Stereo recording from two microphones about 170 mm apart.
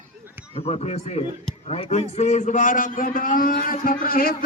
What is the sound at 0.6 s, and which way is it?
A man's voice, 40° left (ahead or behind).